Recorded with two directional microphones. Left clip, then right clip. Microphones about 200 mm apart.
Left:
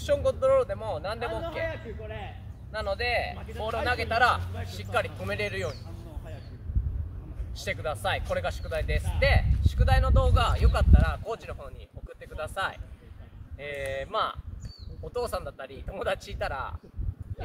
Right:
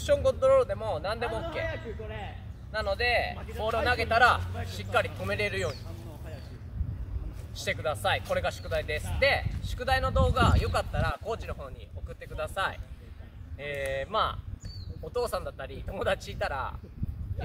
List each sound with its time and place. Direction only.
0.0 s speech: centre (ahead or behind)
1.7 s a man's voice: 45° left (ahead or behind)
2.7 s speech: centre (ahead or behind)
7.5 s speech: centre (ahead or behind)